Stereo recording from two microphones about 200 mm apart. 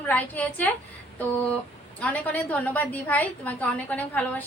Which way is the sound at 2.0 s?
5° left (ahead or behind).